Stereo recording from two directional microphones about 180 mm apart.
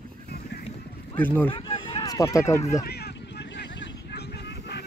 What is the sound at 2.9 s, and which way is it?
Vehicle, 65° left (ahead or behind).